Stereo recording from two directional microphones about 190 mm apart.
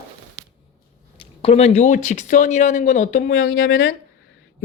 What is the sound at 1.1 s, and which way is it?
Speech, 30° left (ahead or behind).